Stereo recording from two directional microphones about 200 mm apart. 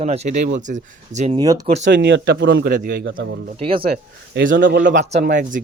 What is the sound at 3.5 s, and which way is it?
Speech, 30° right (ahead or behind).